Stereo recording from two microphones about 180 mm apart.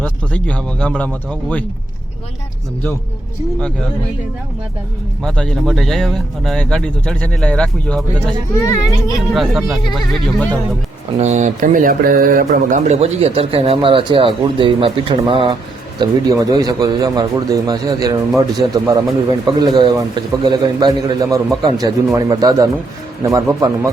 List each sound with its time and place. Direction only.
0.0 s speech: 5° left (ahead or behind)
5.2 s speech: 5° left (ahead or behind)
8.6 s a child's voice: 20° left (ahead or behind)
9.3 s speech: centre (ahead or behind)
11.2 s a man's voice: 40° right (ahead or behind); by 23.9 s 20° right (ahead or behind)